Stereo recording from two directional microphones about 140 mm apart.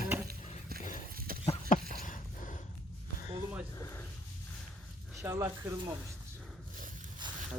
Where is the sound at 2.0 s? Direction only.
70° left (ahead or behind).